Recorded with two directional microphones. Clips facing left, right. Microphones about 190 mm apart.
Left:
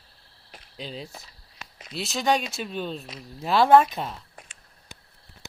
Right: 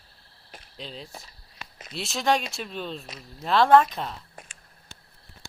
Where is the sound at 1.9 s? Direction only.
Centre (ahead or behind).